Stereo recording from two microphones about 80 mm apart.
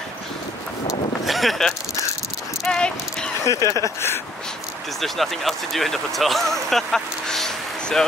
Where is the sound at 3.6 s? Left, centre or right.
Right.